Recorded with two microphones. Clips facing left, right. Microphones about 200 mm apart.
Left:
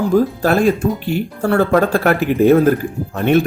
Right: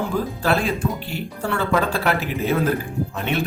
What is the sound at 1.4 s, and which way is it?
A man's voice, 45° left (ahead or behind).